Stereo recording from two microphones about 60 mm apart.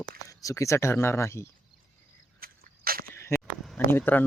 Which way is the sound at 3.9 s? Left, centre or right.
Left.